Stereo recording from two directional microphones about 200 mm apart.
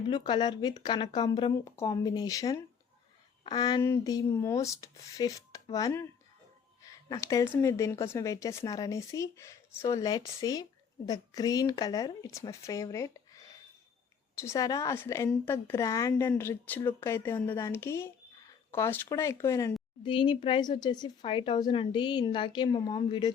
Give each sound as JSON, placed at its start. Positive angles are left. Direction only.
{"t": 0.1, "sound": "a woman's voice", "side_deg": 20}
{"t": 20.1, "sound": "a woman's voice", "side_deg": 25}